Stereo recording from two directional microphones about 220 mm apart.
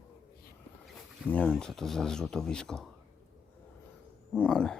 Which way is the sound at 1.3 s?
5° left (ahead or behind).